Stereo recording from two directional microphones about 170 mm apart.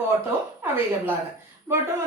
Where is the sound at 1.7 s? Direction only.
15° right (ahead or behind).